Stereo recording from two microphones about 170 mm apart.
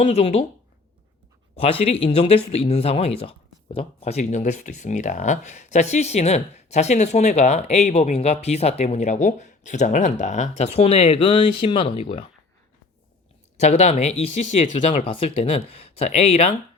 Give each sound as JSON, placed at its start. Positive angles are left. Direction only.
{"t": 0.0, "sound": "speech", "side_deg": 35}
{"t": 1.5, "sound": "speech", "side_deg": 35}
{"t": 13.6, "sound": "speech", "side_deg": 40}